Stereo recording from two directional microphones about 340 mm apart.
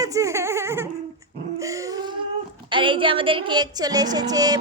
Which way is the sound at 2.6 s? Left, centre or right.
Centre.